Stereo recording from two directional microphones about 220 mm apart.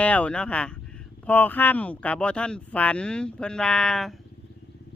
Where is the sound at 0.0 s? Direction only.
5° left (ahead or behind).